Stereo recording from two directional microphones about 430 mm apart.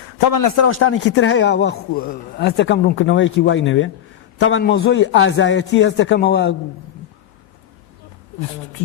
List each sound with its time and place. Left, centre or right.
0.3 s a man's voice: left
0.6 s a man's voice: left